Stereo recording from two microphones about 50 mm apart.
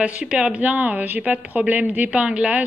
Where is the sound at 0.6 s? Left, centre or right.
Right.